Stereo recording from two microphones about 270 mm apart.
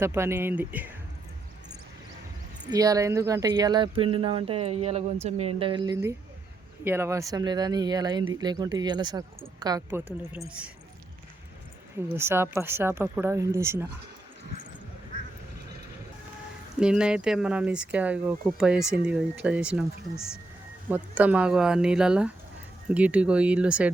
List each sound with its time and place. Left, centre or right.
0.0 s speech: centre
2.6 s a woman's voice: centre
12.1 s speech: centre
16.8 s speech: centre